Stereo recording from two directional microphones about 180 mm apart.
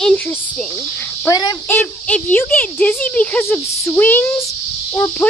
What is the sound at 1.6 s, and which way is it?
Speech, 10° left (ahead or behind).